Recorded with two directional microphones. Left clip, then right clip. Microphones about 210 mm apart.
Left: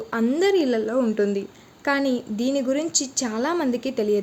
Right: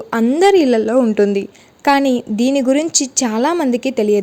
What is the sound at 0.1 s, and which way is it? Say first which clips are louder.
A woman's voice: right 9 dB; 35° right (ahead or behind).